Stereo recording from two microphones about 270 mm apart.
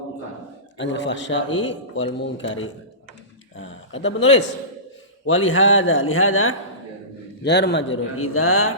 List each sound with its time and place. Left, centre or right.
0.8 s a man's voice: left
7.4 s speech: left